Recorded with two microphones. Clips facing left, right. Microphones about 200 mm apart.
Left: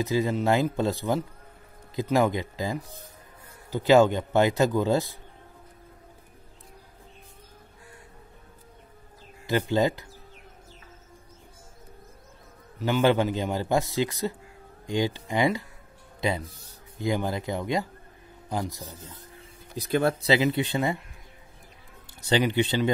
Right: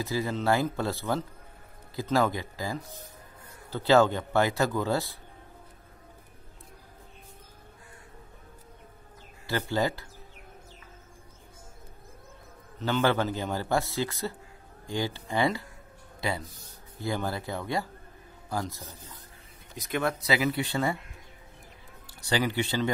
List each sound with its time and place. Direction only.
0.0 s a man's voice: 20° left (ahead or behind)
9.5 s a man's voice: 20° left (ahead or behind)
12.7 s a man's voice: 10° left (ahead or behind)
19.7 s speech: 30° left (ahead or behind)
22.0 s speech: 20° left (ahead or behind)